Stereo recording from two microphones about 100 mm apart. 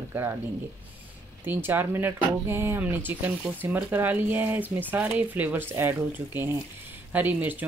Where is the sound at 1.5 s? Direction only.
20° right (ahead or behind).